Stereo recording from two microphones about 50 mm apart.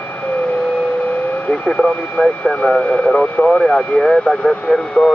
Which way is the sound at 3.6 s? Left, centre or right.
Centre.